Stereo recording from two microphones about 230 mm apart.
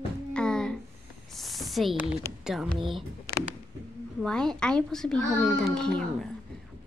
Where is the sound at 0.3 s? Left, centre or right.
Centre.